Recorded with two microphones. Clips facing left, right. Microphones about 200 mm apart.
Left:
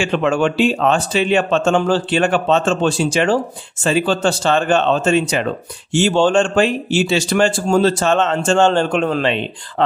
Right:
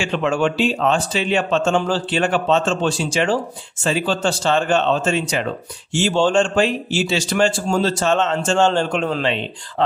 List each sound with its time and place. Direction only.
0.0 s speech: 55° left (ahead or behind)